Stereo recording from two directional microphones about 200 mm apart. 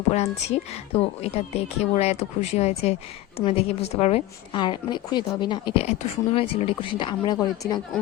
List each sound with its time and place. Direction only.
0.1 s a woman's voice: 30° left (ahead or behind)